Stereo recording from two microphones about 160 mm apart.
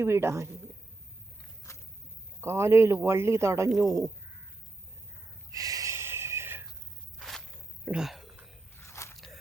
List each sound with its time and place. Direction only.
0.0 s speech: 15° right (ahead or behind)
1.7 s a sound: 15° left (ahead or behind)
2.4 s speech: 15° right (ahead or behind)
5.5 s snort: 20° right (ahead or behind)
7.2 s walk: centre (ahead or behind)
7.9 s a sound: 5° right (ahead or behind)
8.7 s biting: 15° left (ahead or behind)
9.1 s biting: centre (ahead or behind)